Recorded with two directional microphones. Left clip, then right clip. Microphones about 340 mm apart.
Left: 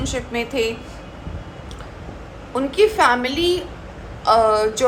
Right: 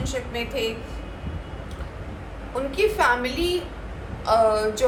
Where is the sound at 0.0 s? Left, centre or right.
Left.